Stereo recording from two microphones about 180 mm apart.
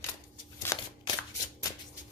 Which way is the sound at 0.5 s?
20° left (ahead or behind).